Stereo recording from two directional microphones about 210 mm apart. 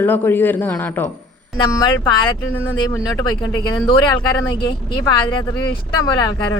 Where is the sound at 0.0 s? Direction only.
10° left (ahead or behind).